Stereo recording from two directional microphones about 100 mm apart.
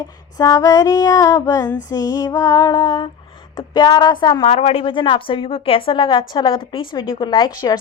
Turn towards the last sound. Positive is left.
turn(degrees=45)  # may be behind; listen again after turning